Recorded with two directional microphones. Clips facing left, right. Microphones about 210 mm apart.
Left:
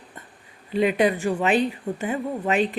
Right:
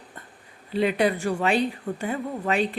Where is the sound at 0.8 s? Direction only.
15° left (ahead or behind).